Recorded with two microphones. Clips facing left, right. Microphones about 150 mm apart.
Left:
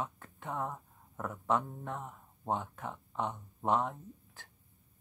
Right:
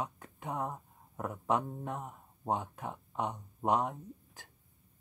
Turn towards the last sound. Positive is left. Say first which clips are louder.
# right 2 dB
turn(degrees=-15)  # may be behind; listen again after turning